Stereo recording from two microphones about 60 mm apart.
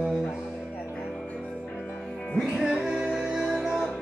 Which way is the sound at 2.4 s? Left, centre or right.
Centre.